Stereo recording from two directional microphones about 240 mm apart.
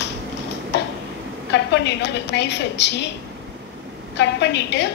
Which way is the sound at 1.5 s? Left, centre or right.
Left.